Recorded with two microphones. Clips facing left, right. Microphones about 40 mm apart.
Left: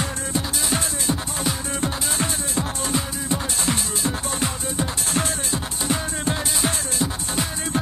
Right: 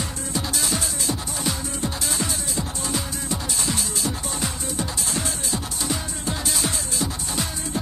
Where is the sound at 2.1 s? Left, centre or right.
Left.